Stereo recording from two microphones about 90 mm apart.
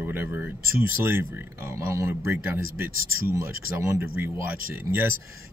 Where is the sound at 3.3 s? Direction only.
30° right (ahead or behind).